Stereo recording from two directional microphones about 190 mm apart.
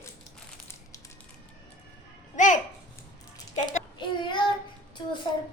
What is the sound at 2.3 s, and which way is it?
Speech, 40° left (ahead or behind).